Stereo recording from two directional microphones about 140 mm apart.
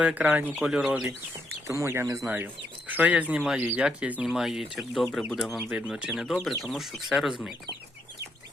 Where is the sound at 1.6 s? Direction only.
20° right (ahead or behind); by 7.5 s 5° right (ahead or behind).